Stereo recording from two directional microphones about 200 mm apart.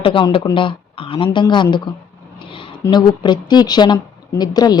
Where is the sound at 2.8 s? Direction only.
20° left (ahead or behind).